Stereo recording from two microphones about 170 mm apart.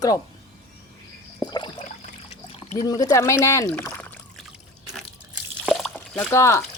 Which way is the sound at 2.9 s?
20° left (ahead or behind).